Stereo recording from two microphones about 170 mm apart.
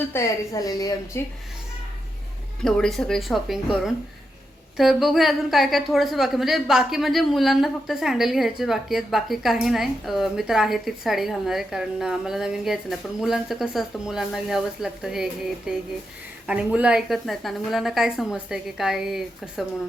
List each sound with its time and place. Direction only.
0.1 s a woman's voice: 20° left (ahead or behind)
2.6 s a woman's voice: 5° left (ahead or behind)